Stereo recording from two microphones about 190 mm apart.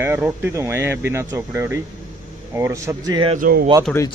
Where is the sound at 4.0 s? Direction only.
15° left (ahead or behind).